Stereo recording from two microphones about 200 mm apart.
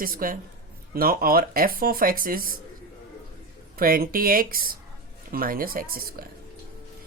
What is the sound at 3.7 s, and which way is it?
Speech, 45° right (ahead or behind).